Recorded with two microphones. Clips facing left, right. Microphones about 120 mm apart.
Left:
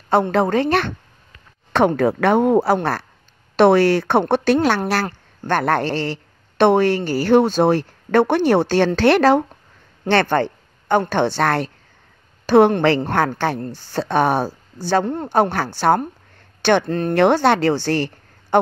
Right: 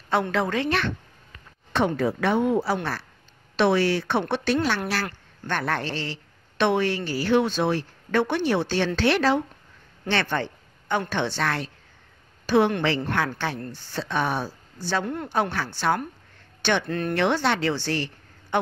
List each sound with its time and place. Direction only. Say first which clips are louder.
0.3 s speech: left 7 dB; 40° left (ahead or behind)
1.7 s speech: left 7 dB; 55° left (ahead or behind)
4.7 s a woman's voice: left 7 dB; 45° left (ahead or behind)
17.2 s a woman's voice: left 9 dB; 50° left (ahead or behind)